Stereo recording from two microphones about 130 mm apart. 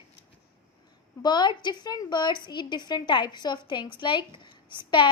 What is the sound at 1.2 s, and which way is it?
A woman's voice, 35° left (ahead or behind).